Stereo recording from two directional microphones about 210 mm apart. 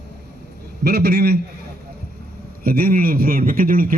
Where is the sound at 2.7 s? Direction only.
45° right (ahead or behind).